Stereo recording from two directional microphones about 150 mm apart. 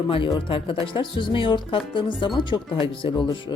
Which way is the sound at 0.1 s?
35° left (ahead or behind).